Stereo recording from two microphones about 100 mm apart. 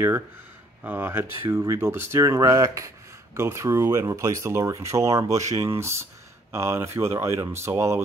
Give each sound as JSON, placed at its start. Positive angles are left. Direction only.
{"t": 0.8, "sound": "speech", "side_deg": -20}